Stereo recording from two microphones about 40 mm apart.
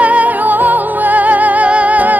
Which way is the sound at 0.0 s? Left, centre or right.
Right.